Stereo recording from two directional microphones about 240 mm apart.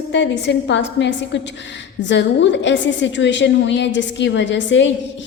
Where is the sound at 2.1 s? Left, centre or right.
Left.